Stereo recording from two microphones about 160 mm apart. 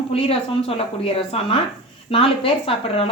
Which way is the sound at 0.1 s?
35° left (ahead or behind).